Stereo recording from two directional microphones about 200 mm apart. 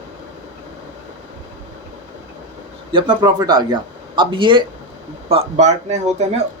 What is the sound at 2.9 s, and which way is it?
Speech, 20° right (ahead or behind).